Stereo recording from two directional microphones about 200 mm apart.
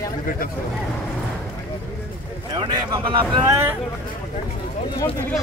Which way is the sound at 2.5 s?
25° right (ahead or behind).